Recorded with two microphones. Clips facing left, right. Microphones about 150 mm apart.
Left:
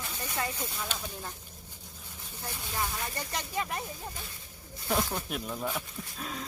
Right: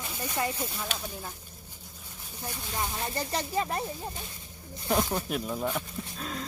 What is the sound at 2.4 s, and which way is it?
Speech, 20° right (ahead or behind).